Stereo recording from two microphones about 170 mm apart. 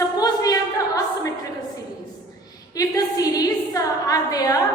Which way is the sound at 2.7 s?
20° left (ahead or behind).